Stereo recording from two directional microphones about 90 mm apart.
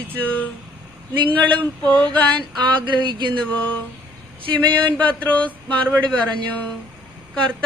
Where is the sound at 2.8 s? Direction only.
60° right (ahead or behind).